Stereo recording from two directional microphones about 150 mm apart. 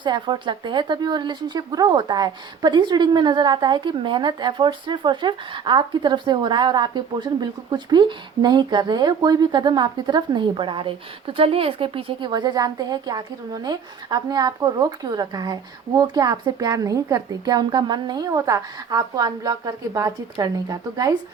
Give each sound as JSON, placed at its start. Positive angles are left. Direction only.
{"t": 0.0, "sound": "speech", "side_deg": -30}